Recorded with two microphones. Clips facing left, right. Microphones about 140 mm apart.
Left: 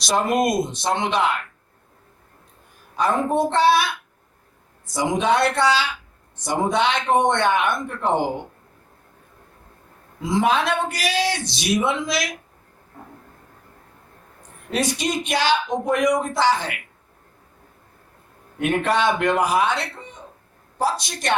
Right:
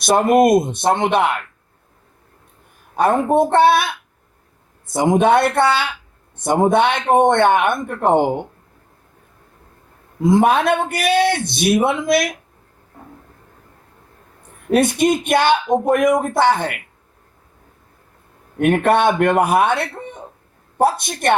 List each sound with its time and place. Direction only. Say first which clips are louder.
0.0 s speech: right 7 dB; 55° right (ahead or behind)
2.9 s speech: right 5 dB; 55° right (ahead or behind)
10.2 s speech: right 6 dB; 55° right (ahead or behind)
14.7 s speech: right 8 dB; 55° right (ahead or behind)
18.6 s speech: right 6 dB; 55° right (ahead or behind)